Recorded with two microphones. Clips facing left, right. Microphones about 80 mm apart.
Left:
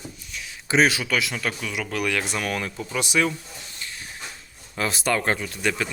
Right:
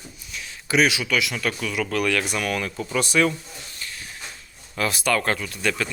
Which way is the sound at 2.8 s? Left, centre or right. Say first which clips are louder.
Right 3 dB; centre.